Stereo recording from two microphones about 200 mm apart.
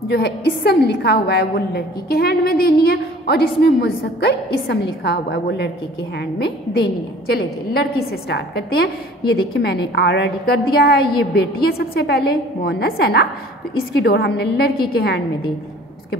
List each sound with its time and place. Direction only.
0.1 s a woman's voice: 55° left (ahead or behind)